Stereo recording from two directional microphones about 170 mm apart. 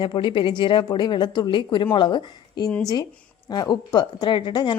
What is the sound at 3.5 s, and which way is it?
A woman's voice, 25° left (ahead or behind).